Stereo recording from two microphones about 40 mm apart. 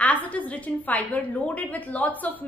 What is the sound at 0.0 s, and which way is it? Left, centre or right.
A woman's voice, left.